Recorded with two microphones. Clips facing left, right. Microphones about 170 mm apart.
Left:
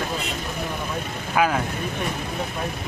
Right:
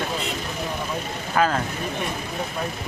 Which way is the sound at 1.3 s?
10° left (ahead or behind).